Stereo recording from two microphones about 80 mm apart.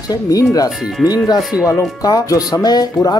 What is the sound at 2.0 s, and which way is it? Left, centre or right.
Music, left.